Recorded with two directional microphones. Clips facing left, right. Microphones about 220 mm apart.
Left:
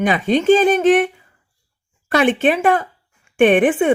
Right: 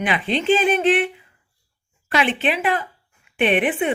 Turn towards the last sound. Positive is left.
turn(degrees=45)  # may be behind; listen again after turning